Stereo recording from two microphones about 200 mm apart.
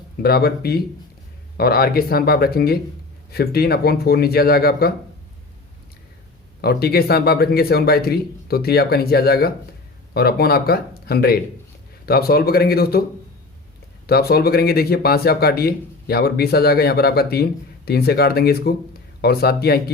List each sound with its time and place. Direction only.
0.2 s speech: 50° left (ahead or behind)
6.6 s speech: 50° left (ahead or behind)
14.1 s speech: 50° left (ahead or behind)